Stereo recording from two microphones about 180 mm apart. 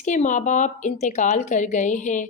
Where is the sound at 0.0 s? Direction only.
45° left (ahead or behind).